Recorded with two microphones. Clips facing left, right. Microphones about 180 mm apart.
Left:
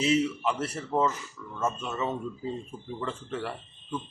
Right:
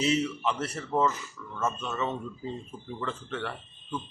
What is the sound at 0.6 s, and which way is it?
Speech, 25° left (ahead or behind).